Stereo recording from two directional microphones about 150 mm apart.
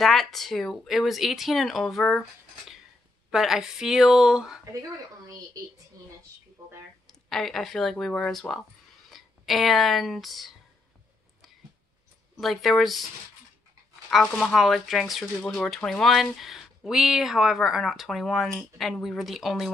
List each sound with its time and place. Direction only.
0.0 s speech: centre (ahead or behind)
3.3 s speech: centre (ahead or behind)
5.2 s speech: 20° right (ahead or behind)
7.1 s speech: 5° left (ahead or behind)
12.4 s speech: centre (ahead or behind)
14.1 s speech: centre (ahead or behind)